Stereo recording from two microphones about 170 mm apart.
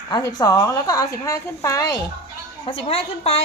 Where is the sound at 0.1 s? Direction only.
20° left (ahead or behind).